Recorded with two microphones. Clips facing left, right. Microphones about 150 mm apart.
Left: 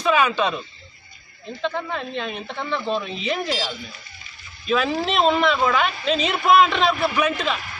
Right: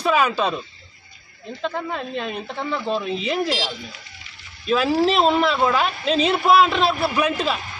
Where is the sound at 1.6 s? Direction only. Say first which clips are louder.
Even; 5° right (ahead or behind).